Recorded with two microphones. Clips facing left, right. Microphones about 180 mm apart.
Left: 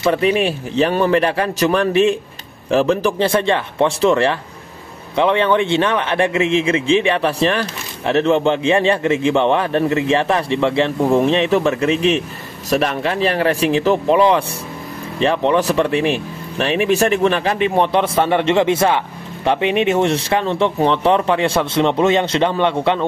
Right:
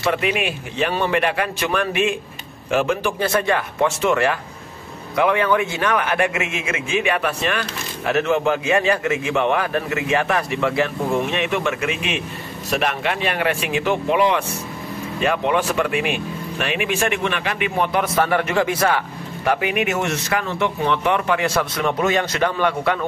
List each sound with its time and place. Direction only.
0.0 s speech: 35° left (ahead or behind)